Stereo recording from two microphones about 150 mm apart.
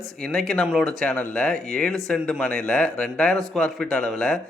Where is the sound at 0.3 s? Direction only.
5° left (ahead or behind).